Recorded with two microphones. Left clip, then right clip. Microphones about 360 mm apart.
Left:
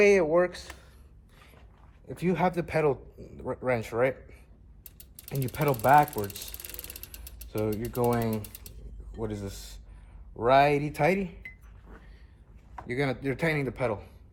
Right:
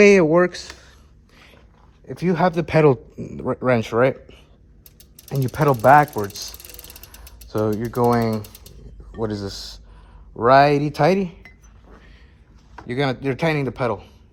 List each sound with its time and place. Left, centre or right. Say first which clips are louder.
0.0 s speech: right 8 dB; right
2.0 s speech: right 8 dB; right
5.5 s speech: right 9 dB; centre
7.5 s speech: right 9 dB; right
9.2 s speech: right 10 dB; centre
12.9 s speech: right 7 dB; centre